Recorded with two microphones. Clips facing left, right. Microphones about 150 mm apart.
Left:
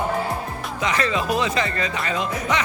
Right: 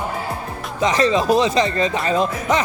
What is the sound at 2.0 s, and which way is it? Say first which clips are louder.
Speech: right 5 dB; 35° right (ahead or behind).